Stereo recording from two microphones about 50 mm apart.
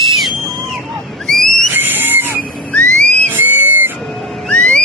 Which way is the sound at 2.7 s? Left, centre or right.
Left.